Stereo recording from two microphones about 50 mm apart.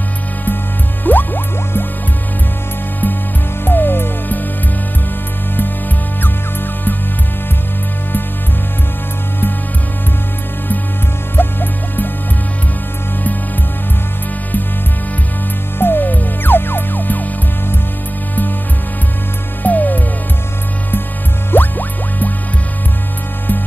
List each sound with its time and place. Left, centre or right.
1.0 s music: left
3.6 s music: left
11.3 s music: left
15.8 s music: left
19.6 s music: left
21.5 s music: left